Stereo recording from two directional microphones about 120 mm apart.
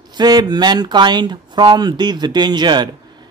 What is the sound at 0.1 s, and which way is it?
A man's voice, 35° right (ahead or behind).